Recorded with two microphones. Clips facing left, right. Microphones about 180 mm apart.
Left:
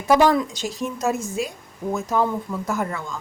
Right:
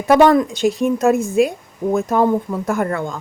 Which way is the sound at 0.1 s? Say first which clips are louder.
Right 5 dB; 55° right (ahead or behind).